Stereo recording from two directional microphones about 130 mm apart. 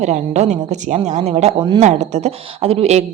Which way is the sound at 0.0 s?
60° right (ahead or behind).